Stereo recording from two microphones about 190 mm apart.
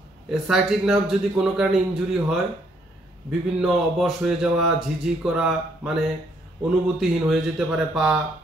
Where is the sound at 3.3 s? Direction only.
Centre (ahead or behind).